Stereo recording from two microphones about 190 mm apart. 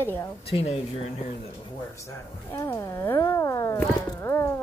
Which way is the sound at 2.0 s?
15° left (ahead or behind).